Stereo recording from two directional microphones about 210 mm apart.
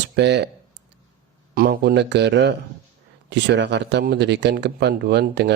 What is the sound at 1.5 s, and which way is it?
Speech, 45° right (ahead or behind).